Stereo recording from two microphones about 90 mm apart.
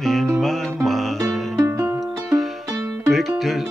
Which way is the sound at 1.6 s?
20° right (ahead or behind).